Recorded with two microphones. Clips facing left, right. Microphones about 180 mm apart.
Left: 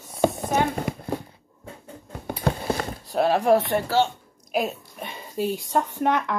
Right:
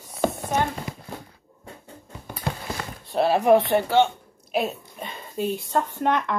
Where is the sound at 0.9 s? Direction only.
60° left (ahead or behind).